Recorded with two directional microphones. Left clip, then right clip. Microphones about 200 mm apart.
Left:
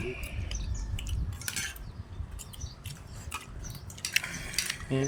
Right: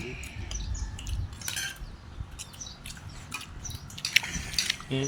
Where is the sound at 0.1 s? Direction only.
30° left (ahead or behind).